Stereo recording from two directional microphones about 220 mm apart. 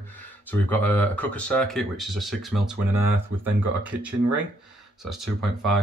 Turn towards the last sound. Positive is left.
turn(degrees=0)  # may be behind; listen again after turning